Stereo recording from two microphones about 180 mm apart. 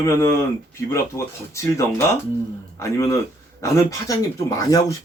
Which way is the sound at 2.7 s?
15° left (ahead or behind).